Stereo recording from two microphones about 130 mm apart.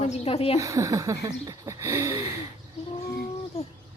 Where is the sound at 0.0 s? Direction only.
55° left (ahead or behind).